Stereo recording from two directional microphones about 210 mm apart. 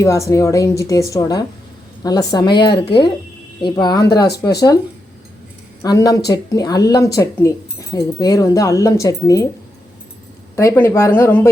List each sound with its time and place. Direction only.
0.0 s a woman's voice: 15° left (ahead or behind)
4.1 s speech: 50° left (ahead or behind)
5.8 s speech: 20° left (ahead or behind)
10.5 s speech: 15° left (ahead or behind)